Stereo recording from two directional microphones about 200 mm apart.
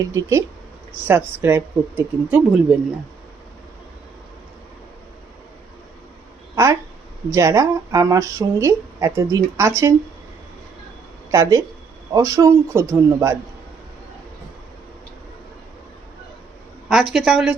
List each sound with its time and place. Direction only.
0.0 s speech: 15° right (ahead or behind)
7.3 s speech: 15° right (ahead or behind)
12.1 s speech: 15° right (ahead or behind)
16.9 s a woman's voice: centre (ahead or behind)